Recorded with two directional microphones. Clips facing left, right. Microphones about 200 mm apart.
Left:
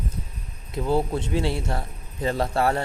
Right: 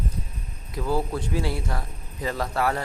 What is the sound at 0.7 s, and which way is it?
A man's voice, 25° left (ahead or behind).